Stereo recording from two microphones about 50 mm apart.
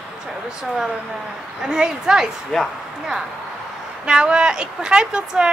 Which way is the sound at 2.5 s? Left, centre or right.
Centre.